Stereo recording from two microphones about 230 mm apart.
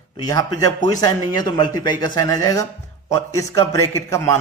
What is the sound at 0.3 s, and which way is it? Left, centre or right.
Speech, centre.